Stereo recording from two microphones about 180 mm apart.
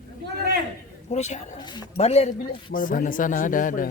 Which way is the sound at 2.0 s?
35° left (ahead or behind).